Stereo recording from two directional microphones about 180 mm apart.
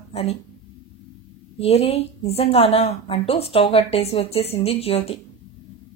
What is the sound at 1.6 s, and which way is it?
A woman's voice, 35° left (ahead or behind).